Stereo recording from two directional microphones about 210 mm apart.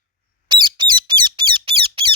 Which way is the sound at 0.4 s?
20° right (ahead or behind).